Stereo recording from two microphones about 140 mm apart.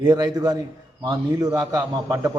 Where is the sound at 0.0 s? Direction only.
30° right (ahead or behind).